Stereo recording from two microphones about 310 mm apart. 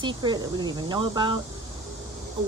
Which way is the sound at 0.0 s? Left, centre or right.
Centre.